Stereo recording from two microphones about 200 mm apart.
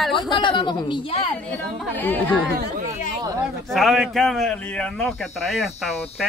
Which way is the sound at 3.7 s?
Centre (ahead or behind).